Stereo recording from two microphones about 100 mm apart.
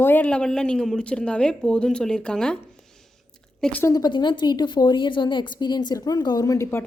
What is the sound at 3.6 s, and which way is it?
Speech, 15° left (ahead or behind).